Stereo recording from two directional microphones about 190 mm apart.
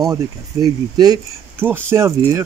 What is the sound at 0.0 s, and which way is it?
Speech, 20° right (ahead or behind).